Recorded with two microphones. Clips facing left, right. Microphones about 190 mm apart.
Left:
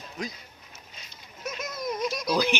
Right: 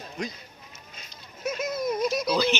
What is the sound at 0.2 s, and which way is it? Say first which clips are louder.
Speech: right 2 dB; centre (ahead or behind).